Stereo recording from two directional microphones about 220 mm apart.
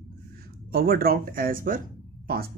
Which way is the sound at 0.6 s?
45° right (ahead or behind).